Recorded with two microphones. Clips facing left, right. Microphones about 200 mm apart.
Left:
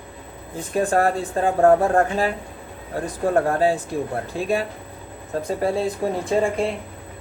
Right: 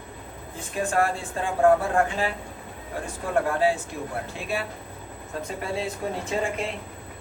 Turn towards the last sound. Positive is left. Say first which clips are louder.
# left 7 dB
turn(degrees=35)  # may be behind; listen again after turning